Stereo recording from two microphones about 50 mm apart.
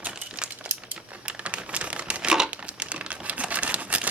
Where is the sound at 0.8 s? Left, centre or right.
Right.